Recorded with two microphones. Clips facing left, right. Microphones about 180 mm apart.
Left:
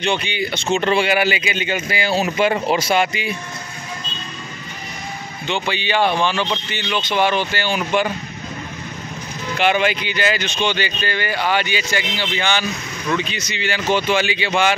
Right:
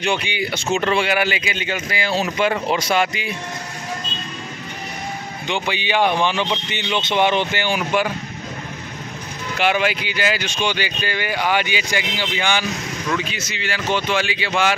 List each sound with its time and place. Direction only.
0.0 s speech: 10° right (ahead or behind)
5.5 s speech: 15° right (ahead or behind)
9.6 s speech: 5° right (ahead or behind)